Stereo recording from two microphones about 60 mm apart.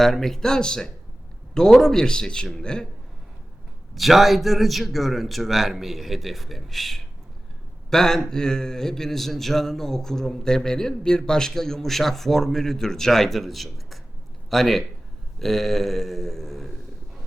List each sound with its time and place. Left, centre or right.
0.0 s a man's voice: centre
3.9 s a man's voice: centre